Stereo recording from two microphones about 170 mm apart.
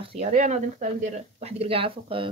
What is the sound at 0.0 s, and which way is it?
Speech, 35° right (ahead or behind).